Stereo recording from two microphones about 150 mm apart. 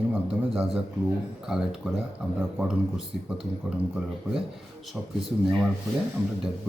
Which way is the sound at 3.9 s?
5° right (ahead or behind).